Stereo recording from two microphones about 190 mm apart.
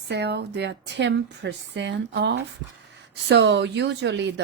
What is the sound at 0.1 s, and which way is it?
A woman's voice, 60° right (ahead or behind).